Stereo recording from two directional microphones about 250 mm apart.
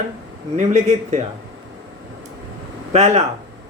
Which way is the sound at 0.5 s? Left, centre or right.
Right.